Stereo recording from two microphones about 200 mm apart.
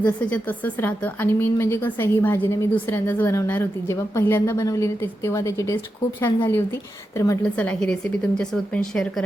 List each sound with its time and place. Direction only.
0.0 s a woman's voice: 5° left (ahead or behind)